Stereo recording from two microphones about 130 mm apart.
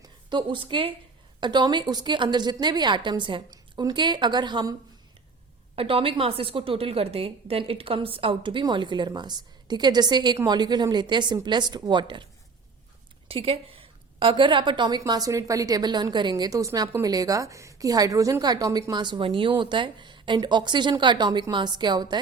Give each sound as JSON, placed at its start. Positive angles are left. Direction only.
{"t": 0.0, "sound": "a woman's voice", "side_deg": -35}
{"t": 5.7, "sound": "a woman's voice", "side_deg": -45}